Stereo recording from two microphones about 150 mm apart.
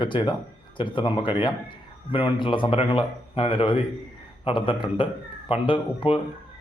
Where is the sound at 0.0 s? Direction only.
30° left (ahead or behind).